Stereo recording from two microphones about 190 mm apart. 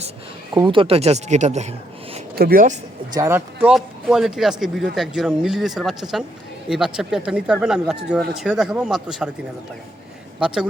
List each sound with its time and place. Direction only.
0.5 s speech: 25° right (ahead or behind)
2.3 s speech: 50° right (ahead or behind)
3.2 s speech: 10° right (ahead or behind)
10.4 s speech: 5° right (ahead or behind)